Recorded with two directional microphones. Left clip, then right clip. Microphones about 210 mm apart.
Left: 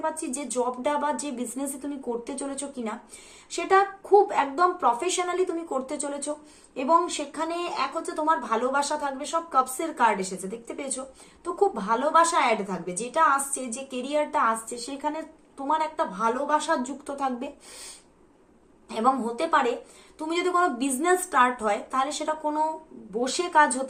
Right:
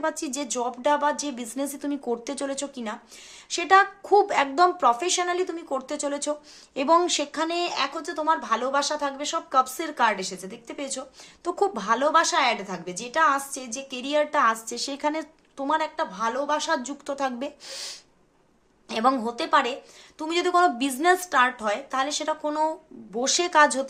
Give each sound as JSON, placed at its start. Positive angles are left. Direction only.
{"t": 0.0, "sound": "speech", "side_deg": -40}
{"t": 11.4, "sound": "speech", "side_deg": -45}
{"t": 18.9, "sound": "speech", "side_deg": -40}